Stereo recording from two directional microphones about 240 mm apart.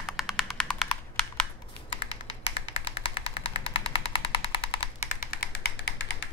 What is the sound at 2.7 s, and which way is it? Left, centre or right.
Music, left.